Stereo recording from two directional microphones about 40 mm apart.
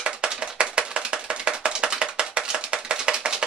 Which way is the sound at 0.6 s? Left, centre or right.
Right.